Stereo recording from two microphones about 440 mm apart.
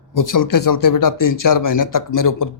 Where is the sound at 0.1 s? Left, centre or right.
Left.